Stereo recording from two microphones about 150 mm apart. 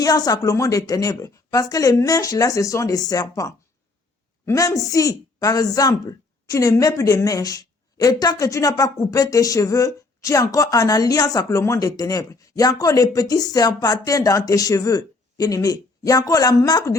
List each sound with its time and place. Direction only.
0.0 s a woman's voice: 25° left (ahead or behind)